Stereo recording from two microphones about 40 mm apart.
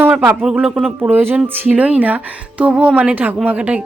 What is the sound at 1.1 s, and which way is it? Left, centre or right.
Speech, right.